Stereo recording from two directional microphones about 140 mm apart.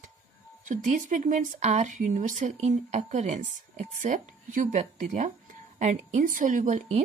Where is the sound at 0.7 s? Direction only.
65° right (ahead or behind).